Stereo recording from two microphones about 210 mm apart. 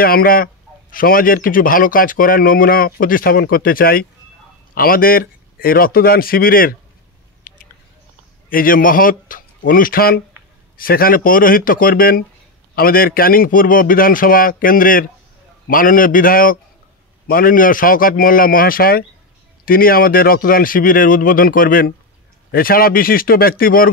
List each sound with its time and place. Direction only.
0.0 s a man's voice: 45° left (ahead or behind)
7.5 s a sound: 40° left (ahead or behind)
8.5 s a man's voice: 40° left (ahead or behind)